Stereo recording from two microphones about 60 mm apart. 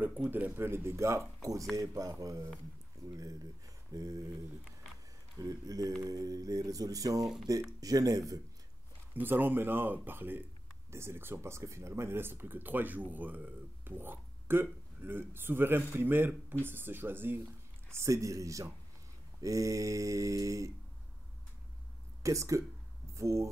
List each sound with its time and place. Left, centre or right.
0.3 s speech: right
1.4 s speech: right
6.0 s speech: right
9.1 s speech: right
10.9 s speech: right
17.8 s mantra: right
22.2 s speech: right